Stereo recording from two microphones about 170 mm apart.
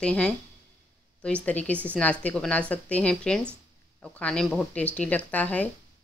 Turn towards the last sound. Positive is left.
turn(degrees=10)  # may be behind; listen again after turning